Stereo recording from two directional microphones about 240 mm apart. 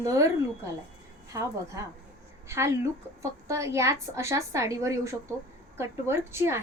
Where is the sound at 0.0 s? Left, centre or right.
Centre.